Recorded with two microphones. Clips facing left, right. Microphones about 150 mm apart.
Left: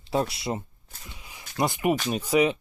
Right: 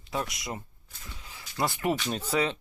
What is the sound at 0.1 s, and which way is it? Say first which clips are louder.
Speech: left 7 dB; 30° left (ahead or behind).